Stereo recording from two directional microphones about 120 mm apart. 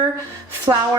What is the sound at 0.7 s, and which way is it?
Speech, 30° right (ahead or behind).